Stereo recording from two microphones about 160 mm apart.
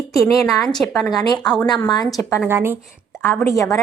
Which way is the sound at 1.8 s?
25° left (ahead or behind).